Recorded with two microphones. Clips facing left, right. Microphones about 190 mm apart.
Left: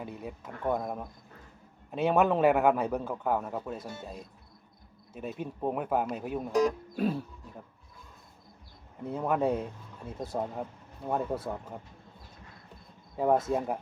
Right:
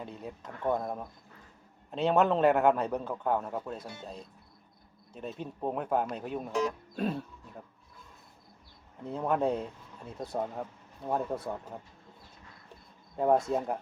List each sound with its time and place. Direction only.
0.0 s a man's voice: 10° left (ahead or behind)
6.5 s speech: 35° left (ahead or behind)
6.9 s speech: 5° left (ahead or behind)
9.0 s speech: 5° left (ahead or behind)
13.1 s speech: centre (ahead or behind)